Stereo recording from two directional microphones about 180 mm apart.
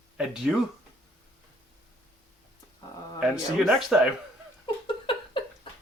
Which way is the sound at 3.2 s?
Centre (ahead or behind).